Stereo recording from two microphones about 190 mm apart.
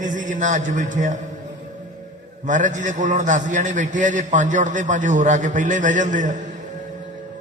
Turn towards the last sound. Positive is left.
turn(degrees=-40)  # may be behind; listen again after turning